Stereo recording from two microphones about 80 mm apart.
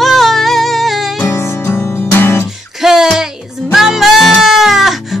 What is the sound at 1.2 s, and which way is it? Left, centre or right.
Music, left.